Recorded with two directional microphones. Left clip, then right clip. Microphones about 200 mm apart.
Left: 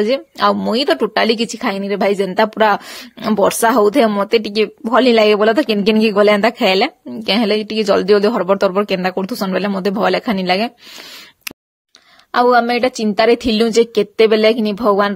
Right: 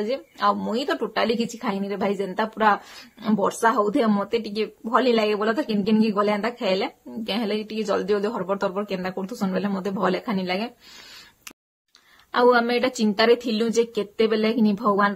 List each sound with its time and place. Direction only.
0.0 s a woman's voice: 45° left (ahead or behind)
12.3 s a woman's voice: 30° left (ahead or behind)